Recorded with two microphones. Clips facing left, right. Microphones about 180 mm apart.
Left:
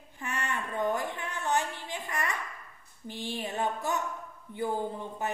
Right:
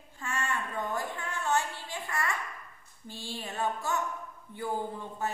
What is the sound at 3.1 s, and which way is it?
Speech, 20° left (ahead or behind).